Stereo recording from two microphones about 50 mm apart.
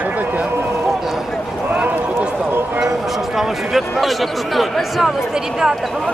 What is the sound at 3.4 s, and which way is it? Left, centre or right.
Speech, centre.